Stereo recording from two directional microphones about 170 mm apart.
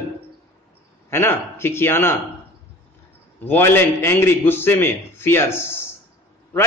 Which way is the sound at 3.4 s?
10° left (ahead or behind).